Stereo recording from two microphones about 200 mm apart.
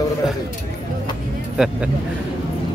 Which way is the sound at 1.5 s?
5° right (ahead or behind).